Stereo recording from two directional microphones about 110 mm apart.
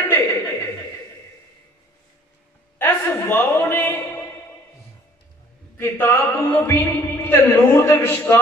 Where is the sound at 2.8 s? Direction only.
20° left (ahead or behind).